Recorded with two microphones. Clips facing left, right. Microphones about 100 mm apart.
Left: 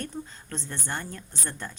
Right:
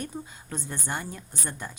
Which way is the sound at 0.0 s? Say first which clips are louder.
Even; 10° right (ahead or behind).